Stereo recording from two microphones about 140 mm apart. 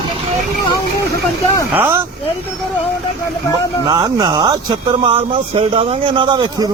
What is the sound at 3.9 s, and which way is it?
Speech, 30° right (ahead or behind).